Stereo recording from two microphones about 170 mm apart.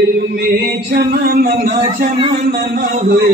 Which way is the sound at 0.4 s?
65° right (ahead or behind).